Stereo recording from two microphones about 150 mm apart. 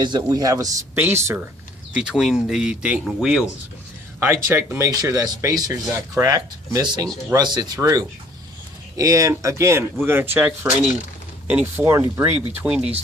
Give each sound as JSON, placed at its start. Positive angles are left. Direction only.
{"t": 0.0, "sound": "speech", "side_deg": -30}
{"t": 2.0, "sound": "speech", "side_deg": -5}
{"t": 4.2, "sound": "speech", "side_deg": -15}
{"t": 12.6, "sound": "speech", "side_deg": -5}